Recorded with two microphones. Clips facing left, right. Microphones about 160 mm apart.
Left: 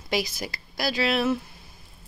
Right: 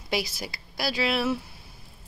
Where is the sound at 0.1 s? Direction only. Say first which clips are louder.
Left 2 dB; 10° right (ahead or behind).